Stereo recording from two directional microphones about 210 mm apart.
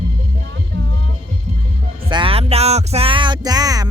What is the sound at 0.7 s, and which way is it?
Music, 60° right (ahead or behind).